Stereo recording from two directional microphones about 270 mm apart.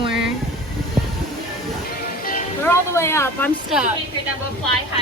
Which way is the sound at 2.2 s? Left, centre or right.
Left.